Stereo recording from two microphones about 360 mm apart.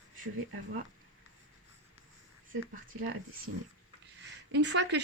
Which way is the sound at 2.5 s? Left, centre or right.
Right.